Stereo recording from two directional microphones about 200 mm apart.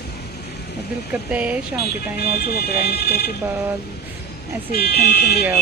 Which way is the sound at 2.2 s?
55° left (ahead or behind).